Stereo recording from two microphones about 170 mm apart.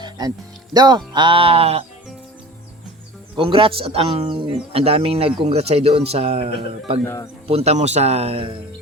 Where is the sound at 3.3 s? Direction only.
30° right (ahead or behind).